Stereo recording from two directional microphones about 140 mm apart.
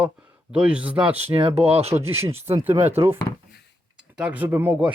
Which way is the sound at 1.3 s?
40° right (ahead or behind).